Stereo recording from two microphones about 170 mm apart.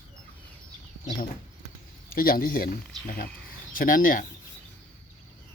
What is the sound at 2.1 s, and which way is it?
Speech, 60° left (ahead or behind).